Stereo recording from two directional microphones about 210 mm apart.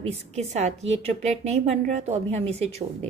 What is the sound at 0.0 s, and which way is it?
A woman's voice, 30° right (ahead or behind).